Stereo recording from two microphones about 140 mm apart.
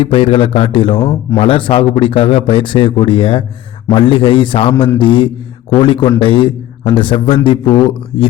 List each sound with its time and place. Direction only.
0.0 s speech: 40° left (ahead or behind)